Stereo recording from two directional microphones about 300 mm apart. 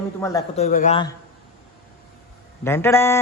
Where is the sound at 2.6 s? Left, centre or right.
Centre.